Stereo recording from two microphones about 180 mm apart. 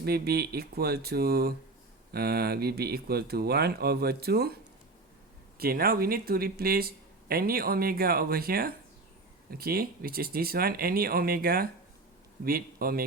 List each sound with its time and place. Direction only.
0.0 s speech: 60° right (ahead or behind)
5.5 s speech: 55° right (ahead or behind)